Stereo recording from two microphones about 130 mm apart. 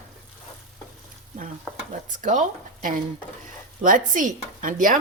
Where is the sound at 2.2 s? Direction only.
75° right (ahead or behind).